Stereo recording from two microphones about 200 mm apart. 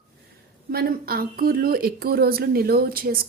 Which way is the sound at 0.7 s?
50° right (ahead or behind).